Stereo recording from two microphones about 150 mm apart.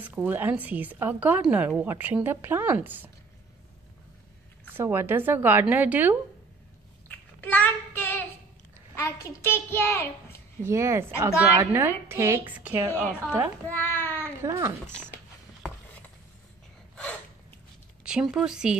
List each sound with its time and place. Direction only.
0.0 s a woman's voice: 10° right (ahead or behind)
4.7 s a woman's voice: 15° right (ahead or behind)
7.3 s child singing: 10° left (ahead or behind)
8.9 s a child's voice: 20° left (ahead or behind)
10.6 s a woman's voice: 20° right (ahead or behind)
13.7 s a child's voice: 15° left (ahead or behind)
14.4 s speech: 20° right (ahead or behind)
18.0 s speech: 5° right (ahead or behind)